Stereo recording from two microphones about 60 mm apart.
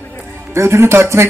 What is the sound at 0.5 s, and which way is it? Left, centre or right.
Speech, right.